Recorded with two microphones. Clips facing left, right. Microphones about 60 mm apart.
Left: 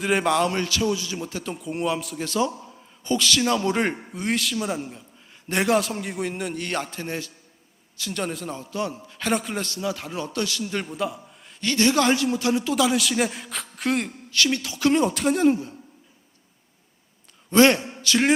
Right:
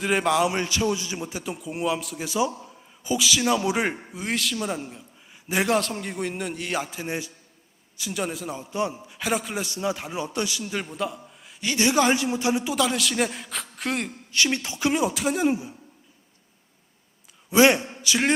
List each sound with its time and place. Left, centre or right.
0.0 s a man's voice: centre
0.5 s a man's voice: centre
1.5 s a man's voice: centre
9.6 s a man's voice: centre
10.6 s a man's voice: centre
11.6 s a man's voice: centre
12.7 s a man's voice: centre
14.3 s a woman's voice: right
14.8 s a man's voice: centre
17.5 s a man's voice: centre